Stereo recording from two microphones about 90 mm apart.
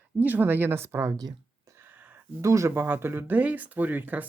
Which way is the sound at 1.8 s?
20° right (ahead or behind).